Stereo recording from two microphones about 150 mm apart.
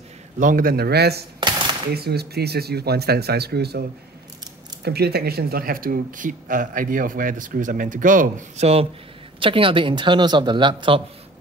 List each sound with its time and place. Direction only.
0.4 s speech: 65° right (ahead or behind); by 1.2 s 90° right
1.4 s a sound: 30° right (ahead or behind)
1.9 s speech: 90° right
4.8 s speech: 90° right; by 8.8 s 45° right (ahead or behind)
9.4 s speech: 35° right (ahead or behind)